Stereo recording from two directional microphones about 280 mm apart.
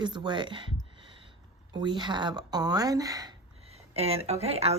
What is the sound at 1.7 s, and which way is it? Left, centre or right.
A woman's voice, centre.